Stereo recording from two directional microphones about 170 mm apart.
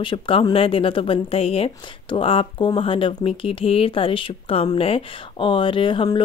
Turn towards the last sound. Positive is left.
turn(degrees=30)  # may be behind; listen again after turning